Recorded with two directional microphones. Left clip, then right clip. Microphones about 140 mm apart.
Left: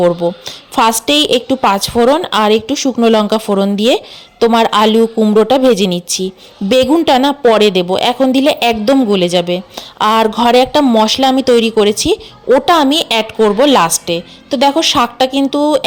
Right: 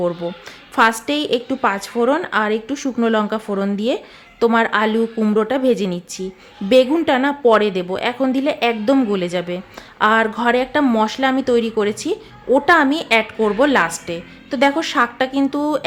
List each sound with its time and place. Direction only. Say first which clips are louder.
0.0 s a woman's voice: left 10 dB; 30° left (ahead or behind)
4.4 s a woman's voice: left 5 dB; 25° left (ahead or behind)
4.6 s a woman's voice: left 8 dB; 40° left (ahead or behind)